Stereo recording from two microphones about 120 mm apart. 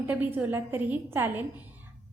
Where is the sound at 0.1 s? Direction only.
15° right (ahead or behind).